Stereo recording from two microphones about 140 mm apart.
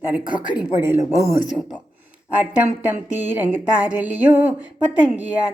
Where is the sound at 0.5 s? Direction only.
10° right (ahead or behind).